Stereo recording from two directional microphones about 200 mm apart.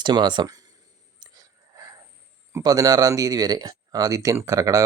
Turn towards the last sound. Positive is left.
turn(degrees=-15)  # may be behind; listen again after turning